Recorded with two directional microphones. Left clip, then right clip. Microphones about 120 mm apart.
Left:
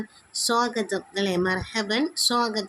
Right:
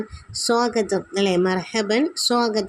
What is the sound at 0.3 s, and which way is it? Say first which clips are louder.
Speech: right 4 dB; 20° right (ahead or behind).